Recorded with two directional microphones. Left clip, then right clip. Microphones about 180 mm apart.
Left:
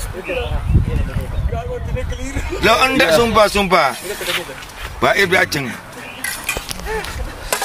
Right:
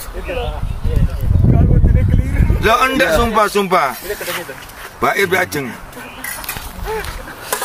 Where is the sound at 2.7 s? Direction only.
35° left (ahead or behind).